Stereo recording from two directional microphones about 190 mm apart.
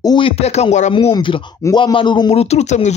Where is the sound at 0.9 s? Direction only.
25° left (ahead or behind).